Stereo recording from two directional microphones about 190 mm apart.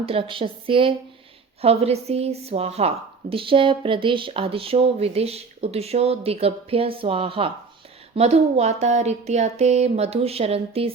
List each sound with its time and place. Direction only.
0.0 s a woman's voice: 30° right (ahead or behind)